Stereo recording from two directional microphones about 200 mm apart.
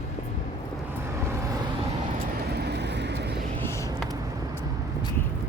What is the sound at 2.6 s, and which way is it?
Vehicle, 55° right (ahead or behind).